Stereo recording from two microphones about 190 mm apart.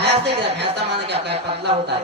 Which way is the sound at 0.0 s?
60° right (ahead or behind).